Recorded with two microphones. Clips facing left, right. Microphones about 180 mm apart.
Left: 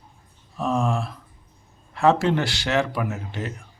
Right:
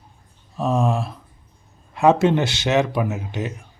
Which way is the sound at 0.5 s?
20° right (ahead or behind).